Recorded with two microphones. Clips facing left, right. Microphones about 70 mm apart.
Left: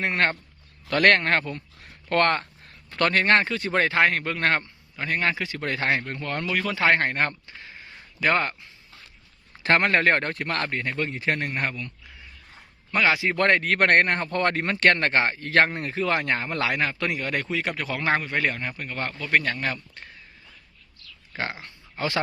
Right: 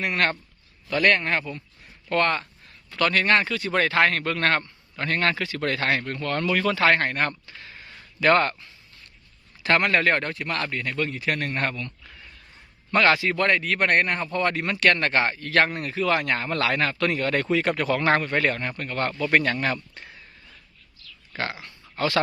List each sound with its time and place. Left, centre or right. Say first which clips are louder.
0.0 s speech: even; left
0.9 s speech: left 2 dB; left; by 6.5 s centre
6.5 s a man's voice: right 4 dB; centre
6.7 s speech: right 1 dB; left
8.2 s a man's voice: right 4 dB; centre
9.6 s a man's voice: left 1 dB; left
11.5 s a man's voice: right 1 dB; centre
12.9 s a man's voice: right 3 dB; centre
13.3 s speech: left 1 dB; left
14.5 s a man's voice: left 1 dB; left; by 20.2 s centre
21.3 s speech: right 1 dB; left